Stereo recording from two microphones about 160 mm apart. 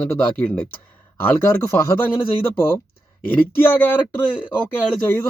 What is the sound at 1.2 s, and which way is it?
Speech, 15° left (ahead or behind).